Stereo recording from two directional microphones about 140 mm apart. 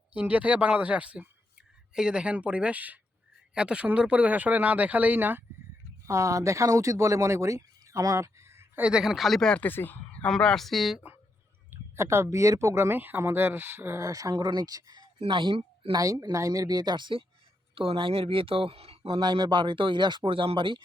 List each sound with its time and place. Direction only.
0.1 s speech: 10° right (ahead or behind)
11.9 s speech: 20° right (ahead or behind); by 15.9 s 40° right (ahead or behind)
15.9 s speech: 25° right (ahead or behind)